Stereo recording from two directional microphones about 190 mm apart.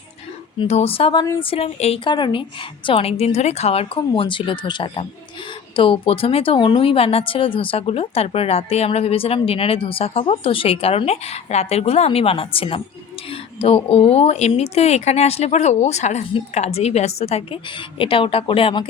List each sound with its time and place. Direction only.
0.6 s a woman's voice: 30° left (ahead or behind)